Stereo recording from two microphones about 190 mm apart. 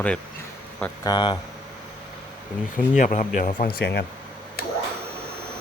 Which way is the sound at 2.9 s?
40° left (ahead or behind).